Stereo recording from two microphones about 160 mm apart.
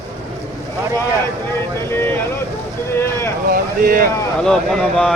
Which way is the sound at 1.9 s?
15° left (ahead or behind).